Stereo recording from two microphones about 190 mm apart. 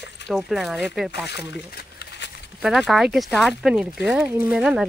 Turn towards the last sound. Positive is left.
turn(degrees=-5)  # may be behind; listen again after turning